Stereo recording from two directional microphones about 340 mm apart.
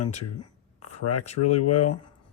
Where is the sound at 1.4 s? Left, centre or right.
Left.